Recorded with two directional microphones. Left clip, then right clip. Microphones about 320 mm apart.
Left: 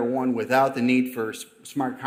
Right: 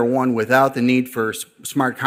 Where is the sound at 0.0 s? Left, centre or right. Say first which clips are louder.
Right 7 dB; right.